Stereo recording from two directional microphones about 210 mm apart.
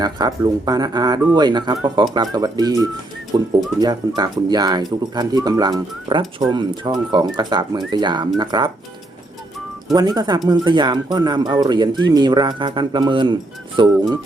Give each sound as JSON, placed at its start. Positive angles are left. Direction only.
{"t": 0.0, "sound": "speech", "side_deg": -20}
{"t": 9.9, "sound": "speech", "side_deg": -20}